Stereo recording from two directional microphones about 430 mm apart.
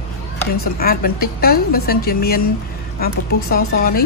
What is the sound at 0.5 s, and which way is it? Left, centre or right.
A woman's voice, left.